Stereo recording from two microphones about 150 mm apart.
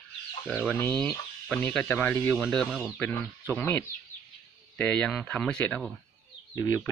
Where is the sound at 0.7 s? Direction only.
10° left (ahead or behind).